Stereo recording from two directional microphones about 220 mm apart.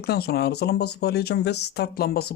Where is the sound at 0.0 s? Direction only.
45° left (ahead or behind).